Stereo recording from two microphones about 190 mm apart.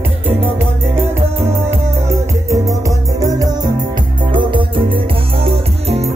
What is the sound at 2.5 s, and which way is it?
Music, 15° right (ahead or behind).